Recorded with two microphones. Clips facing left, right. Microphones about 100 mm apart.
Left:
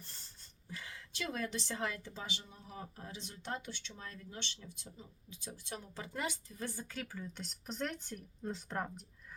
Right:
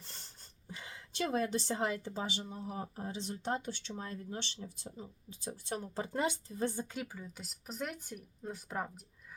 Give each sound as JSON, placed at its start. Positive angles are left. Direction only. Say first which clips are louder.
{"t": 0.0, "sound": "a sound", "louder": "right 3 dB", "side_deg": -85}
{"t": 0.7, "sound": "a woman's voice", "louder": "even", "side_deg": -25}
{"t": 7.3, "sound": "speech", "louder": "right 1 dB", "side_deg": -5}